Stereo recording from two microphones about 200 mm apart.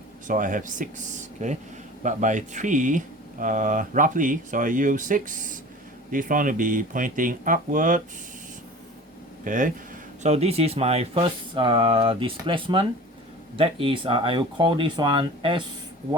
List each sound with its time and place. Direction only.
0.3 s speech: 40° right (ahead or behind)
9.4 s speech: 40° right (ahead or behind); by 15.6 s 25° right (ahead or behind)